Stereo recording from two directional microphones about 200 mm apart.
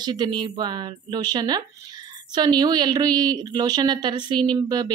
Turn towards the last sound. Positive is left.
turn(degrees=-20)  # may be behind; listen again after turning